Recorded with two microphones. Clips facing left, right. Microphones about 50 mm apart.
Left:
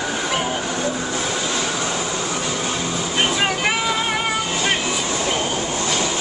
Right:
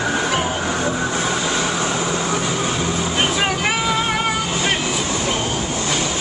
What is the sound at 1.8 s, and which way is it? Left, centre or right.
Vehicle, right.